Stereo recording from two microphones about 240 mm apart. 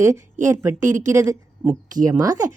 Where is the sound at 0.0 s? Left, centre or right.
Centre.